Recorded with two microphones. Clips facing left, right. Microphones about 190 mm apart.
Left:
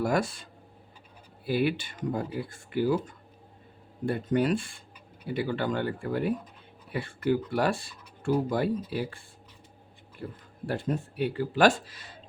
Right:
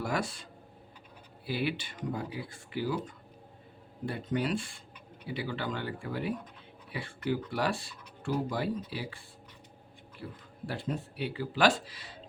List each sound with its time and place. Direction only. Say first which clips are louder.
0.0 s speech: left 6 dB; 45° left (ahead or behind)
1.5 s speech: left 6 dB; 50° left (ahead or behind)
10.2 s speech: left 4 dB; 45° left (ahead or behind)